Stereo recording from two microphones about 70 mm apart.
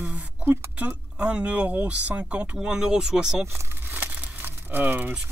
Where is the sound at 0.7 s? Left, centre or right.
Centre.